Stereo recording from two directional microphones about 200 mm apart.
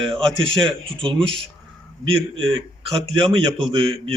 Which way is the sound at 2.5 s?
25° right (ahead or behind).